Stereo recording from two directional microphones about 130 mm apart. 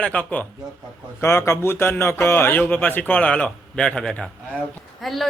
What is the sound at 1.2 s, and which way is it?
A man's voice, 20° left (ahead or behind).